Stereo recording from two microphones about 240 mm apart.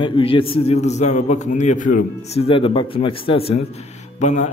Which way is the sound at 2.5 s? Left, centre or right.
Left.